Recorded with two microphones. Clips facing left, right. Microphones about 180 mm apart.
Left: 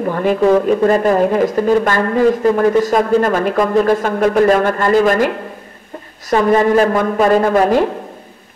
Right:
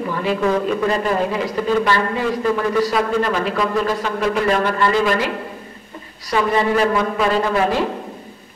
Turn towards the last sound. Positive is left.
turn(degrees=45)  # may be behind; listen again after turning